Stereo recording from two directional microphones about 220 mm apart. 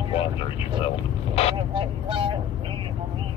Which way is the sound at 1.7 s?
25° right (ahead or behind).